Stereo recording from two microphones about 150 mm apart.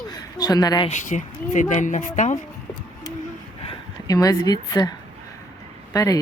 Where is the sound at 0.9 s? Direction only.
55° left (ahead or behind).